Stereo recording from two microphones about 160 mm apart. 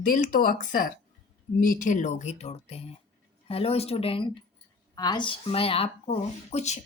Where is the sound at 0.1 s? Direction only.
60° left (ahead or behind).